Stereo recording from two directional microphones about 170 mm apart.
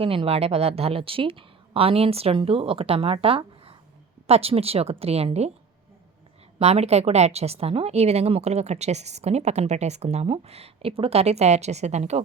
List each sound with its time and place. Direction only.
0.0 s a woman's voice: 35° right (ahead or behind)
6.6 s a woman's voice: 35° right (ahead or behind)